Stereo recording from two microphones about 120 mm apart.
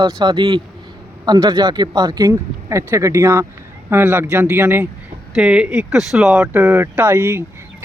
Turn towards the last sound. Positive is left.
turn(degrees=-20)  # may be behind; listen again after turning